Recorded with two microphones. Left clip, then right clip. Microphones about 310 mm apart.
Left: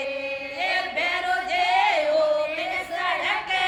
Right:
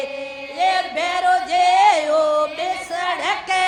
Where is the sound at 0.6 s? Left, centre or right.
Centre.